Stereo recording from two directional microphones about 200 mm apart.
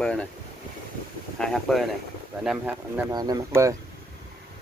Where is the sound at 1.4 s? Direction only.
Centre (ahead or behind).